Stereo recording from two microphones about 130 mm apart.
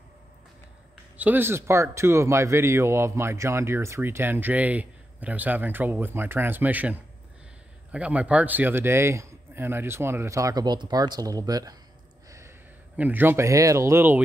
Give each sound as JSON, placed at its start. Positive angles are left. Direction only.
{"t": 1.1, "sound": "speech", "side_deg": -15}